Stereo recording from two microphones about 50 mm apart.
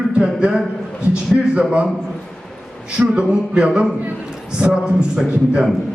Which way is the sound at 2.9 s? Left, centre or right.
Right.